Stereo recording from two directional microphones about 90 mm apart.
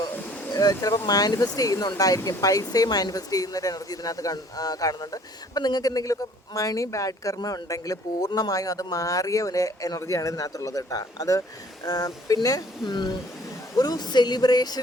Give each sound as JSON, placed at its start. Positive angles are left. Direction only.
{"t": 0.5, "sound": "speech", "side_deg": 40}